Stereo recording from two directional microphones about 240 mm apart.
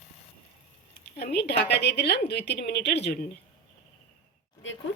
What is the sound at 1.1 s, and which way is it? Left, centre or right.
A woman's voice, left.